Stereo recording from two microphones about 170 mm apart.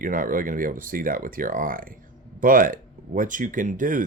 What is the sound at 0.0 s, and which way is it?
Speech, 55° right (ahead or behind).